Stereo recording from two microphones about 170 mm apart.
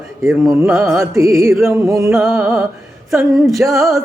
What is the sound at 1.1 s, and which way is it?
Music, 20° right (ahead or behind).